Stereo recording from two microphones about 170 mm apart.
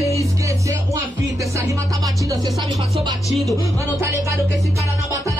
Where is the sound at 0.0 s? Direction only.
20° left (ahead or behind).